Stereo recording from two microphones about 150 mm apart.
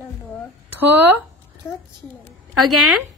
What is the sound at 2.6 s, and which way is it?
Speech, centre (ahead or behind).